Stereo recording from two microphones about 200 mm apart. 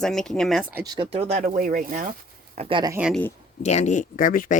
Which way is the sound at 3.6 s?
35° left (ahead or behind).